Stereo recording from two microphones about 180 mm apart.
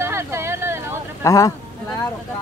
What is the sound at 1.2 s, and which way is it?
Speech, 15° left (ahead or behind).